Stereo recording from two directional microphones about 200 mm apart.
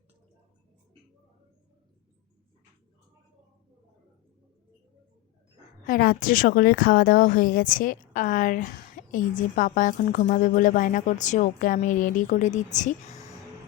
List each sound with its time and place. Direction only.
5.8 s a woman's voice: 45° left (ahead or behind)